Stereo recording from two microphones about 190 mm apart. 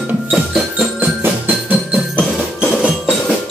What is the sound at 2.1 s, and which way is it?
Music, 5° left (ahead or behind).